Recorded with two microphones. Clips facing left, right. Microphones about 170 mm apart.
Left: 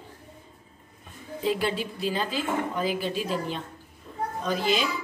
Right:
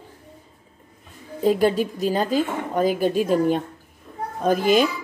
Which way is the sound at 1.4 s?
45° right (ahead or behind).